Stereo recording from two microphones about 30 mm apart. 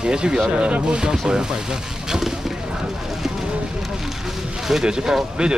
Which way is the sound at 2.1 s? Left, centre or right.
Centre.